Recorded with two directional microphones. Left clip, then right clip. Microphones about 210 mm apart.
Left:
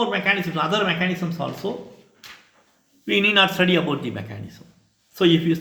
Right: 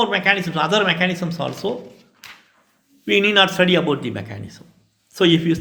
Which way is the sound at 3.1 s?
30° right (ahead or behind).